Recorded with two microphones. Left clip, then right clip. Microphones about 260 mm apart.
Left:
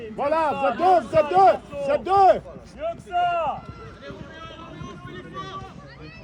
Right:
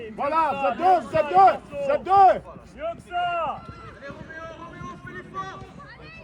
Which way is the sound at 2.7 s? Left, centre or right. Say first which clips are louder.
Left 3 dB; left.